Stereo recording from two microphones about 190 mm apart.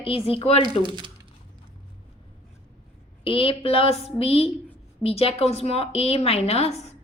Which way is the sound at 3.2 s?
30° left (ahead or behind).